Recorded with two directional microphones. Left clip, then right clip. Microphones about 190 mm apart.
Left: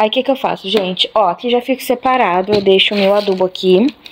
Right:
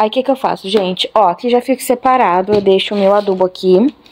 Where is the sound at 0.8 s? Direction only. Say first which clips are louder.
Right 2 dB; 15° right (ahead or behind).